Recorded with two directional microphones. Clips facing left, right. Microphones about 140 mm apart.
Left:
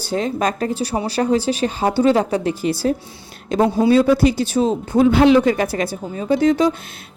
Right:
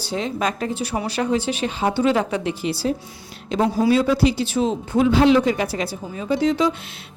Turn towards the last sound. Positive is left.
turn(degrees=45)  # may be behind; listen again after turning